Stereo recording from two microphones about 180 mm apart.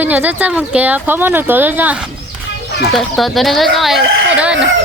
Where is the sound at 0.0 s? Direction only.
10° right (ahead or behind).